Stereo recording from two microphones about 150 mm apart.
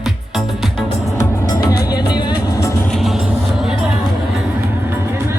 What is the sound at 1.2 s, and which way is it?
Music, 25° left (ahead or behind).